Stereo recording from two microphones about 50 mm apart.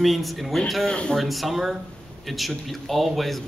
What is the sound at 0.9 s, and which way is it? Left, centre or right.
Speech, centre.